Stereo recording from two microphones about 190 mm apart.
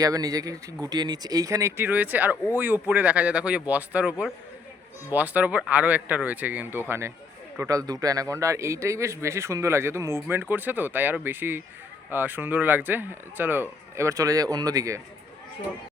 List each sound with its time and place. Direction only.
0.0 s speech: 20° right (ahead or behind)